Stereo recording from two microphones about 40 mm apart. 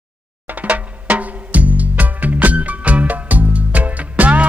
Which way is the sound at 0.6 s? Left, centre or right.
Right.